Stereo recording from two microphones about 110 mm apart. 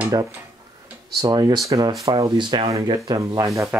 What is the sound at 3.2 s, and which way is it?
Speech, 30° right (ahead or behind).